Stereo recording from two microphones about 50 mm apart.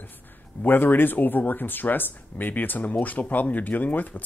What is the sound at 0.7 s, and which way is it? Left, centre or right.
Speech, left.